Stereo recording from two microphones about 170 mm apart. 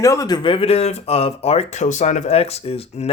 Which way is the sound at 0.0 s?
20° left (ahead or behind).